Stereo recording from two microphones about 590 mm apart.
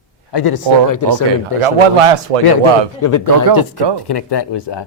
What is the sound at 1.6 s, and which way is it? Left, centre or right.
Speech, right.